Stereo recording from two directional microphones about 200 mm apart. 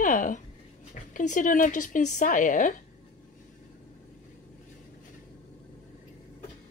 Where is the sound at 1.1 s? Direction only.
40° left (ahead or behind).